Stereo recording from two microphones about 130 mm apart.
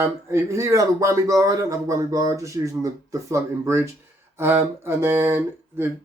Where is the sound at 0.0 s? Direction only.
20° right (ahead or behind).